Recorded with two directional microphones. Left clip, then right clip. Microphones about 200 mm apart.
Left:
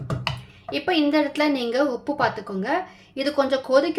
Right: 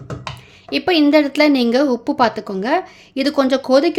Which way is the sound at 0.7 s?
55° right (ahead or behind).